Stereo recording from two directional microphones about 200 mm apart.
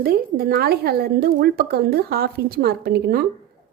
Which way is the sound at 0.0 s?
50° right (ahead or behind).